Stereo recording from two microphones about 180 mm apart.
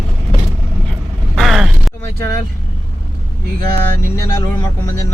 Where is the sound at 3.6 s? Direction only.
55° right (ahead or behind).